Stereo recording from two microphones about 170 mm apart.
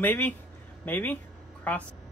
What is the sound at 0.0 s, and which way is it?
Speech, 10° left (ahead or behind).